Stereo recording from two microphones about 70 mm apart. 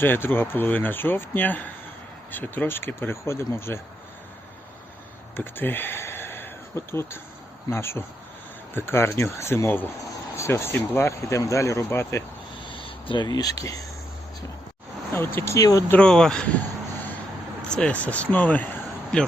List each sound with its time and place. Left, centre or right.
0.0 s speech: left
5.4 s speech: left
13.1 s speech: left
15.1 s speech: left
15.5 s speech: left
16.0 s speech: centre
17.7 s speech: centre